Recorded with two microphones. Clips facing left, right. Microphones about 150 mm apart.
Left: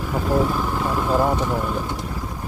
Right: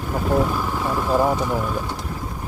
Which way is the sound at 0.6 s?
Centre (ahead or behind).